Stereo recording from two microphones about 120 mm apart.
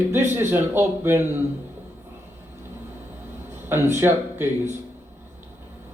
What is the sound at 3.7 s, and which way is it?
Speech, 20° right (ahead or behind).